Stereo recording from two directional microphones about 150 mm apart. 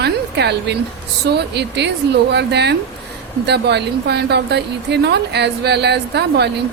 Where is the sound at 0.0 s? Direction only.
90° right.